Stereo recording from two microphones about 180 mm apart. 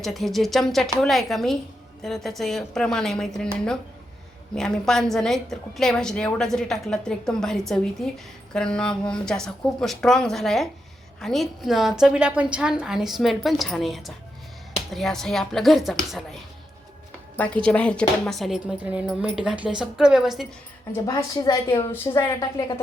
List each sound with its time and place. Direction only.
0.0 s a woman's voice: centre (ahead or behind)
21.7 s a woman's voice: 15° left (ahead or behind)